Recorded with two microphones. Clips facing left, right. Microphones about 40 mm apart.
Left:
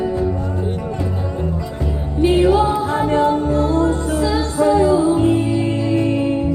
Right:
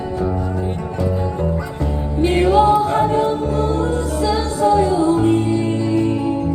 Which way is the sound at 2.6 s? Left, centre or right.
Centre.